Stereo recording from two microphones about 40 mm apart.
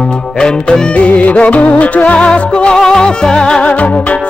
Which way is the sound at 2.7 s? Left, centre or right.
Centre.